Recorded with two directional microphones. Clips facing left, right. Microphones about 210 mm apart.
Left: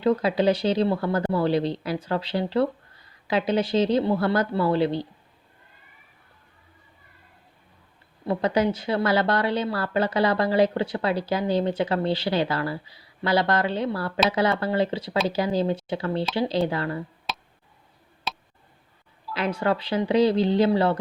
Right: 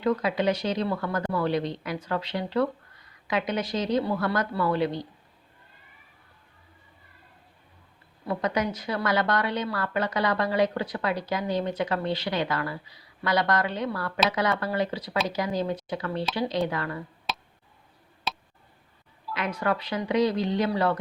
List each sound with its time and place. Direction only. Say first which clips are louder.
0.0 s a woman's voice: left 4 dB; 30° left (ahead or behind)
8.3 s a woman's voice: left 5 dB; 30° left (ahead or behind)
17.3 s tick: right 2 dB; centre (ahead or behind)
18.3 s a sound: even; centre (ahead or behind)
19.3 s a woman's voice: left 3 dB; 30° left (ahead or behind)